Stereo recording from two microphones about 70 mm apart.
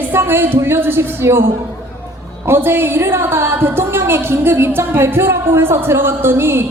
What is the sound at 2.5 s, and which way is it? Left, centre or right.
A woman's voice, right.